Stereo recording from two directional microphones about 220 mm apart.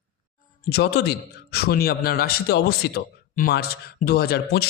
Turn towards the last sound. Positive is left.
turn(degrees=45)  # may be behind; listen again after turning